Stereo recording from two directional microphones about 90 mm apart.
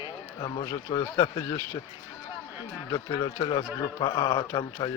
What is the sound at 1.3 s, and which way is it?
Speech, 40° left (ahead or behind).